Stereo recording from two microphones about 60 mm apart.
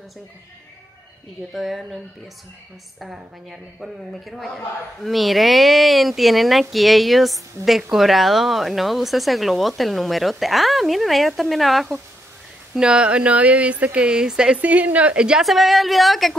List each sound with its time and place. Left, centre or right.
1.5 s speech: centre
3.4 s speech: centre
12.7 s speech: centre
14.6 s speech: right
15.4 s speech: centre